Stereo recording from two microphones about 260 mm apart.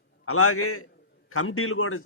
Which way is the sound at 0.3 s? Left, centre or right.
Left.